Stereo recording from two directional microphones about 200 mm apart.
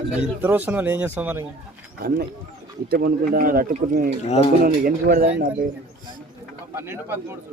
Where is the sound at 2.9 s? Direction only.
45° right (ahead or behind).